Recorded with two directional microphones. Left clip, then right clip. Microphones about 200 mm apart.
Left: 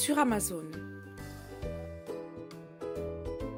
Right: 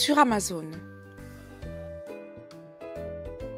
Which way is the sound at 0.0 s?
10° right (ahead or behind).